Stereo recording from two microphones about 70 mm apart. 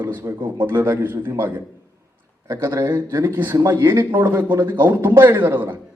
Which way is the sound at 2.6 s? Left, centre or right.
Right.